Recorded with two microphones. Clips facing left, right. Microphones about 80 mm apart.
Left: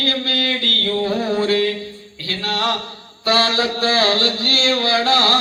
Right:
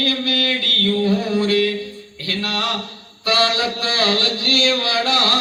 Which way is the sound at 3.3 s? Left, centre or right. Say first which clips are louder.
Left 1 dB; left.